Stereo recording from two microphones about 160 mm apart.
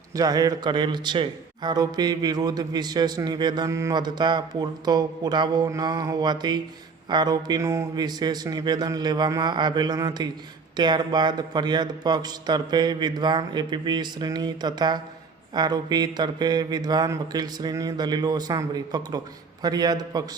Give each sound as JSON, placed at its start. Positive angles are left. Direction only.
{"t": 0.1, "sound": "a man's voice", "side_deg": -20}